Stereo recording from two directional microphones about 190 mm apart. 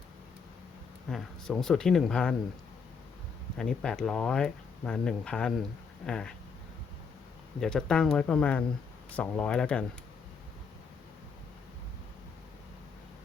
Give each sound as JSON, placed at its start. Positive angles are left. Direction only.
{"t": 1.1, "sound": "speech", "side_deg": 0}
{"t": 3.6, "sound": "speech", "side_deg": 5}
{"t": 7.6, "sound": "speech", "side_deg": 5}